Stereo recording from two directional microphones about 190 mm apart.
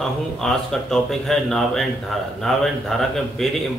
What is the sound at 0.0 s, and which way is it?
Speech, centre (ahead or behind).